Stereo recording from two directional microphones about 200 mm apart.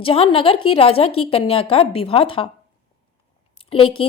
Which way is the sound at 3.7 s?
25° left (ahead or behind).